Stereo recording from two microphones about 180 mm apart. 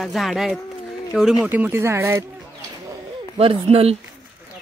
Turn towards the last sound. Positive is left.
turn(degrees=-35)  # may be behind; listen again after turning